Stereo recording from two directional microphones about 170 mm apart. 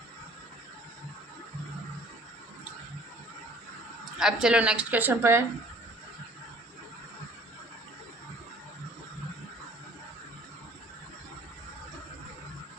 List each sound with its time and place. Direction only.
4.2 s a woman's voice: 5° right (ahead or behind)